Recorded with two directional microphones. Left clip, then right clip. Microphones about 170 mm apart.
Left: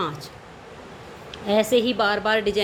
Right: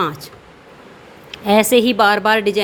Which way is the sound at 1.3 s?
45° right (ahead or behind).